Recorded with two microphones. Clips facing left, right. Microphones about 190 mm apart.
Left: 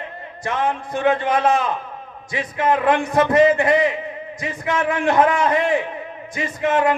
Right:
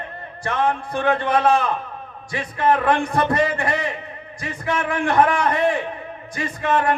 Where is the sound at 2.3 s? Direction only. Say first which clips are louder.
Even; 20° left (ahead or behind).